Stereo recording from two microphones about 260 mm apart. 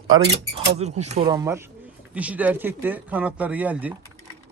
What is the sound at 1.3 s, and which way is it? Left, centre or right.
Speech, centre.